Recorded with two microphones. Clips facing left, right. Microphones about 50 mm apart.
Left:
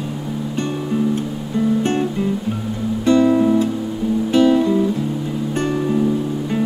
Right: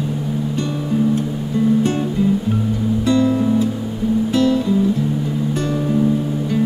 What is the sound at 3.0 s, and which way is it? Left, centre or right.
Music, left.